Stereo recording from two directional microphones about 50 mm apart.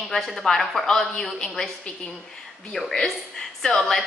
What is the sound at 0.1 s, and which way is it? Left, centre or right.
Speech, centre.